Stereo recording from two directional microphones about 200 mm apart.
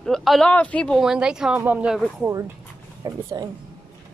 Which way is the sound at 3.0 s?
20° right (ahead or behind).